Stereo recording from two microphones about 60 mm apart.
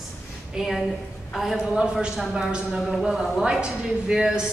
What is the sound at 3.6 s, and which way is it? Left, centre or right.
Speech, centre.